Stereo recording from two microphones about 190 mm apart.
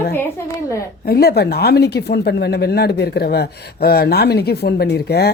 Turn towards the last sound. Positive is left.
turn(degrees=60)  # may be behind; listen again after turning